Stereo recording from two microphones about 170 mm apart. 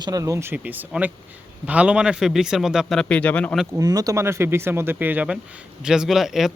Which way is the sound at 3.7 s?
20° right (ahead or behind).